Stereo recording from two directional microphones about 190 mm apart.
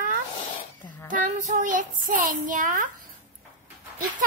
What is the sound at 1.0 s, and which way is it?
Speech, 45° right (ahead or behind).